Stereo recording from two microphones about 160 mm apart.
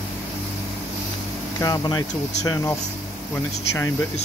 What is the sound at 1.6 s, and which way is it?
Speech, 25° left (ahead or behind).